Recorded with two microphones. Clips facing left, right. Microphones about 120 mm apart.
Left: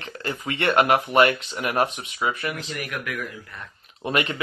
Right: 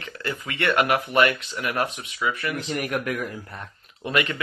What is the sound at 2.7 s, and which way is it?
Speech, 35° right (ahead or behind).